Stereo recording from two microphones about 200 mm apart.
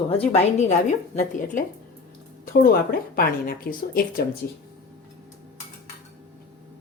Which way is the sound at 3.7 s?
50° left (ahead or behind).